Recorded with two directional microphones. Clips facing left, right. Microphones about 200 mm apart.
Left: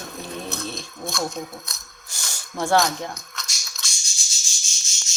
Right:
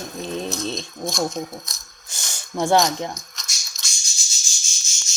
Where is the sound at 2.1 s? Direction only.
20° right (ahead or behind).